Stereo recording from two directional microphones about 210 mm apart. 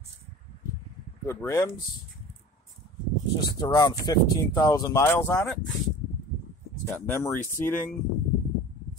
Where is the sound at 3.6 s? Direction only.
20° left (ahead or behind).